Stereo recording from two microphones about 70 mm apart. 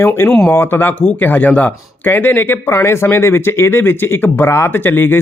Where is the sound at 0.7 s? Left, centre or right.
Left.